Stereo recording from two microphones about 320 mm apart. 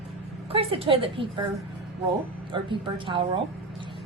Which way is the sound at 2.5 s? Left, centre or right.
Centre.